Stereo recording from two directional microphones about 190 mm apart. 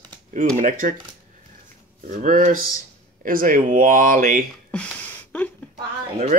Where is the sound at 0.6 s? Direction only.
45° right (ahead or behind).